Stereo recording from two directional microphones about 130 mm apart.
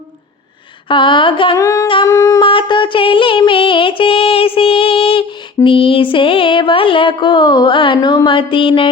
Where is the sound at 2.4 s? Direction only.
40° left (ahead or behind).